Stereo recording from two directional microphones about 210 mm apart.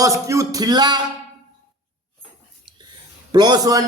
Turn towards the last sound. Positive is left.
turn(degrees=-15)  # may be behind; listen again after turning